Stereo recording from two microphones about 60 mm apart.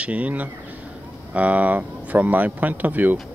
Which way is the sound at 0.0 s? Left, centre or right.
Right.